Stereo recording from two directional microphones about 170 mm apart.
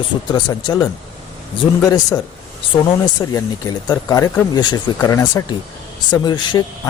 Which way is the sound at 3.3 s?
20° left (ahead or behind).